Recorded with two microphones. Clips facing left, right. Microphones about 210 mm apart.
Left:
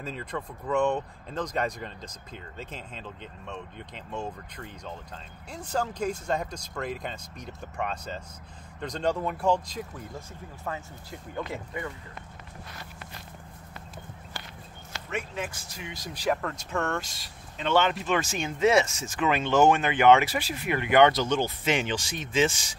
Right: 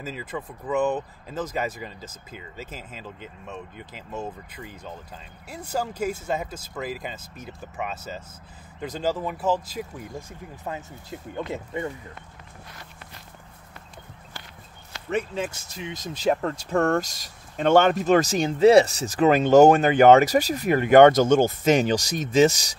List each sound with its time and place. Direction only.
0.0 s speech: 5° right (ahead or behind)
10.6 s speech: 20° right (ahead or behind)
15.0 s speech: 35° right (ahead or behind)